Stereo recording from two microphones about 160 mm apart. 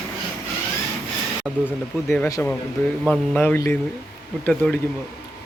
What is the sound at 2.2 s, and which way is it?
A man's voice, 20° left (ahead or behind).